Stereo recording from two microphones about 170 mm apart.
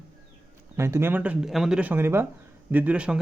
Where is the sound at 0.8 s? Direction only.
15° right (ahead or behind).